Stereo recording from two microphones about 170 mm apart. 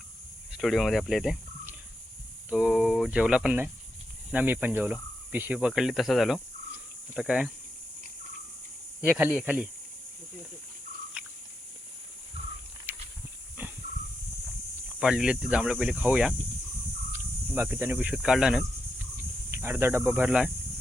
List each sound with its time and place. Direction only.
0.5 s speech: centre (ahead or behind)
9.0 s speech: 10° right (ahead or behind)
12.9 s a sound: 10° right (ahead or behind)
13.6 s dog: 10° right (ahead or behind)
14.9 s speech: 5° right (ahead or behind)
19.1 s speech: 15° right (ahead or behind)